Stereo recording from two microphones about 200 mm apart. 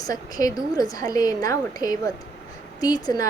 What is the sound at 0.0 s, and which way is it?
A woman's voice, 20° left (ahead or behind).